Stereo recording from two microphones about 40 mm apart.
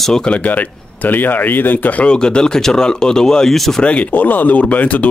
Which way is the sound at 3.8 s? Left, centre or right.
Left.